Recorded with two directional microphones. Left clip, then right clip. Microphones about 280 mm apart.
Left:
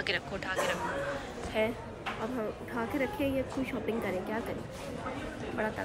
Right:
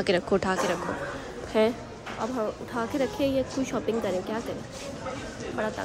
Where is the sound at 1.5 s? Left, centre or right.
Right.